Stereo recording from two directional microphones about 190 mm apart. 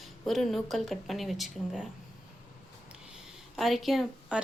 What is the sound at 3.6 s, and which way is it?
Speech, centre (ahead or behind).